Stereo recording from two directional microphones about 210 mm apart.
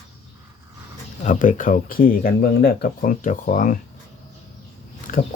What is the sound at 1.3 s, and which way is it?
Speech, 40° left (ahead or behind).